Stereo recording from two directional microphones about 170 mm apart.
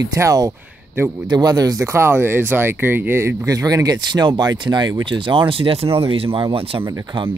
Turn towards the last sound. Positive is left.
turn(degrees=-30)  # may be behind; listen again after turning